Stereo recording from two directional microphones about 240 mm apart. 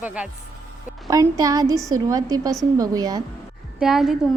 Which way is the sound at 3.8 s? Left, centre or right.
Centre.